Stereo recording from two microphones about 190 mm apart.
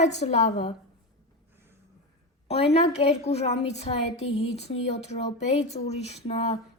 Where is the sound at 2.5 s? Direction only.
30° left (ahead or behind).